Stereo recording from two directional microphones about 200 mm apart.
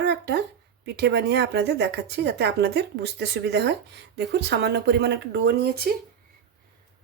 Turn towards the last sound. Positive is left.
turn(degrees=-55)  # may be behind; listen again after turning